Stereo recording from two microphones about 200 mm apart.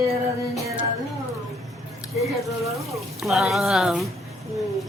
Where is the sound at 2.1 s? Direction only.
Centre (ahead or behind).